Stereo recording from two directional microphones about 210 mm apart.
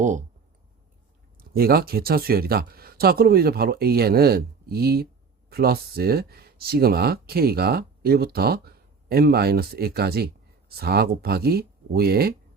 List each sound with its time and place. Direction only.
0.0 s speech: 35° right (ahead or behind)
1.4 s speech: 45° right (ahead or behind)